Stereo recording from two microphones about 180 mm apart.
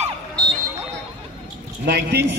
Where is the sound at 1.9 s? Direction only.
65° right (ahead or behind).